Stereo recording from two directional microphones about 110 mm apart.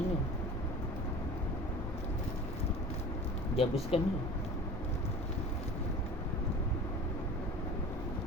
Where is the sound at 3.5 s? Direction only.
60° left (ahead or behind).